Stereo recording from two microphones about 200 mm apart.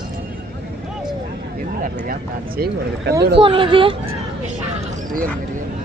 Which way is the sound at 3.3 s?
25° right (ahead or behind).